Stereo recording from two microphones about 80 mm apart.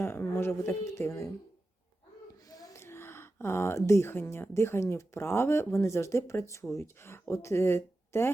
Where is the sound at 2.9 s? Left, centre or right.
Left.